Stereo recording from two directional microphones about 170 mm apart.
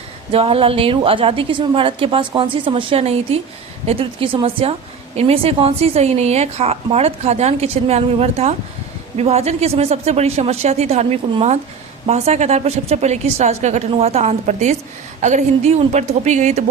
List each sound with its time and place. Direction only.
0.3 s a woman's voice: 35° right (ahead or behind)